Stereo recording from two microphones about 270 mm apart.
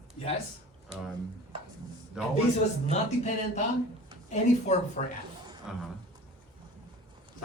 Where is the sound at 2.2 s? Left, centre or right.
Centre.